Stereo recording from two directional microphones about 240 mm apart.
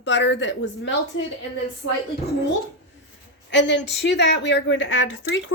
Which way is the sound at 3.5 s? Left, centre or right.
Left.